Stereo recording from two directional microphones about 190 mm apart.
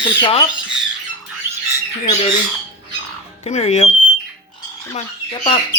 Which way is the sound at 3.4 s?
35° left (ahead or behind).